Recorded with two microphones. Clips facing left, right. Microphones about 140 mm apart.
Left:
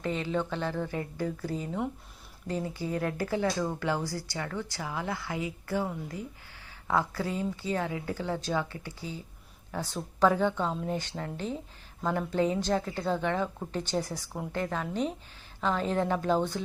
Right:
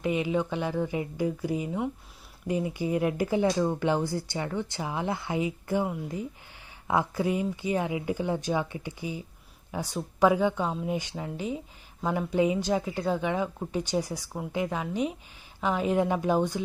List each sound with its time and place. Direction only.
0.0 s speech: 15° right (ahead or behind)